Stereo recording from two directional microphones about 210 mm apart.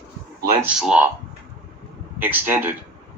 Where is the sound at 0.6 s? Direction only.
5° right (ahead or behind).